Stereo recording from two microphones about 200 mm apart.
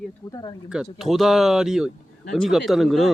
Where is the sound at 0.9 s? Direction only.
Centre (ahead or behind).